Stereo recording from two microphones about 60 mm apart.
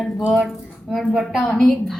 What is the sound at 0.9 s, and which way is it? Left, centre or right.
Speech, centre.